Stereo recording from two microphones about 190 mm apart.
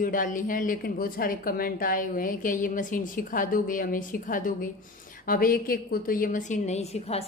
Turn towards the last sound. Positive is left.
turn(degrees=35)  # may be behind; listen again after turning